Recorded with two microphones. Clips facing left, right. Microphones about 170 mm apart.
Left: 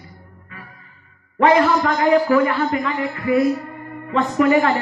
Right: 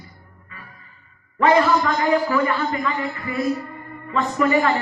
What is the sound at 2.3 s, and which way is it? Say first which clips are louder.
A man's voice: left 4 dB; 55° left (ahead or behind).